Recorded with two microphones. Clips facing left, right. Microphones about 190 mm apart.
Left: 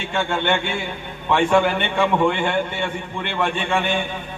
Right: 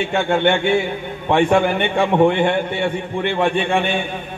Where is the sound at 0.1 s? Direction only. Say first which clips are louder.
Right 3 dB; 55° right (ahead or behind).